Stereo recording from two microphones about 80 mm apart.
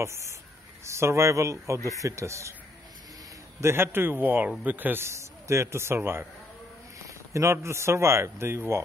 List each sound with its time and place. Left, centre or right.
0.0 s a man's voice: right
3.6 s a man's voice: right
7.3 s a man's voice: right